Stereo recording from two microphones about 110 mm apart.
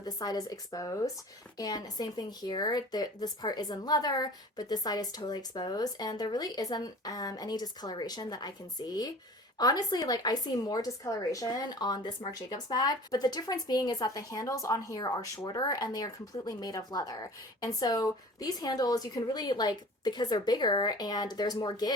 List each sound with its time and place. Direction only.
0.0 s a woman's voice: 35° left (ahead or behind)